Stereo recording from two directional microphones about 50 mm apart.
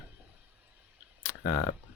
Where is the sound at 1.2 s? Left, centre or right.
Left.